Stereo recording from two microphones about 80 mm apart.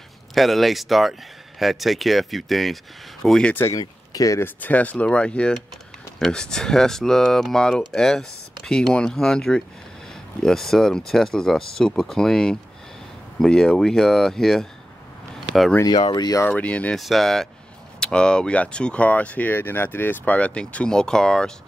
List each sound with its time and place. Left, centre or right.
0.3 s speech: centre
4.1 s speech: left
4.4 s speech: left; by 14.7 s centre
15.9 s speech: left
16.4 s speech: centre
16.9 s speech: centre